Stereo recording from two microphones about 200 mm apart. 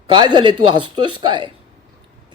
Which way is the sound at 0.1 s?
20° right (ahead or behind).